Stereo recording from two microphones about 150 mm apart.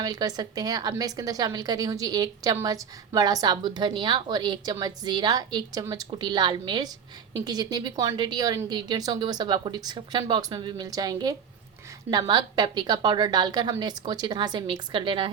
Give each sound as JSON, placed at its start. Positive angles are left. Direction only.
{"t": 0.0, "sound": "a woman's voice", "side_deg": -25}